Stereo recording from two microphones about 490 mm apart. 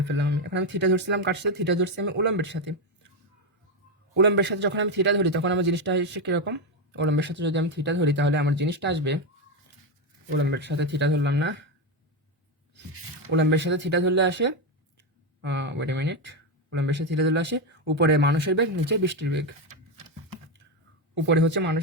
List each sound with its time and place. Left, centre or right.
0.0 s a man's voice: right
4.1 s a man's voice: right
10.2 s a man's voice: right
13.3 s a man's voice: right
21.2 s a man's voice: right